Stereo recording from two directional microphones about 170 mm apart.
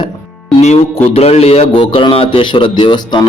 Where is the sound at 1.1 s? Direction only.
40° left (ahead or behind).